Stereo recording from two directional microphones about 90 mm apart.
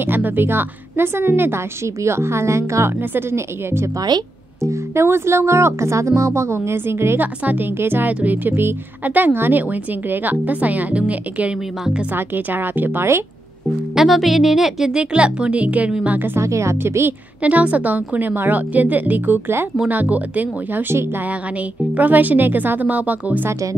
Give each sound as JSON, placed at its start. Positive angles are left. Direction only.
{"t": 0.0, "sound": "a woman's voice", "side_deg": -25}
{"t": 4.1, "sound": "speech", "side_deg": -50}
{"t": 4.6, "sound": "speech", "side_deg": -30}
{"t": 12.1, "sound": "speech", "side_deg": -20}
{"t": 13.9, "sound": "speech", "side_deg": 0}
{"t": 16.3, "sound": "speech", "side_deg": -35}
{"t": 17.4, "sound": "speech", "side_deg": -15}